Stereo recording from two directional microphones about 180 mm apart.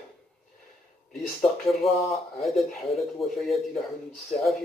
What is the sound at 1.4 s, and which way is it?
Speech, centre (ahead or behind).